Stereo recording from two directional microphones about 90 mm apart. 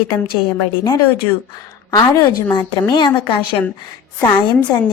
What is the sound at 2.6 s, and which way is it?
A woman's voice, 55° left (ahead or behind).